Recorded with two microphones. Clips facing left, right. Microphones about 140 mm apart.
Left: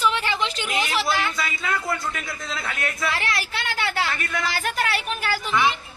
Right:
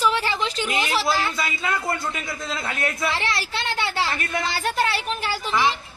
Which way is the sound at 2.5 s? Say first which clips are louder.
Right 2 dB; 30° right (ahead or behind).